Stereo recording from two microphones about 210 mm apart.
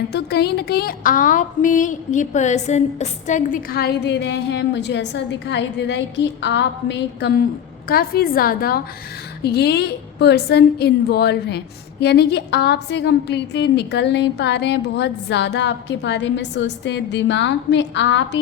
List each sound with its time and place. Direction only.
0.1 s a woman's voice: 50° left (ahead or behind)